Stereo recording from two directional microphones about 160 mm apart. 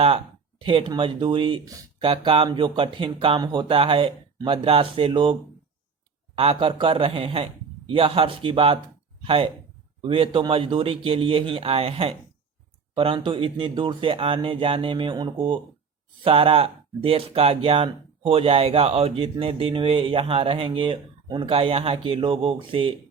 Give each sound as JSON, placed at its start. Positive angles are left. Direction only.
{"t": 0.6, "sound": "speech", "side_deg": -35}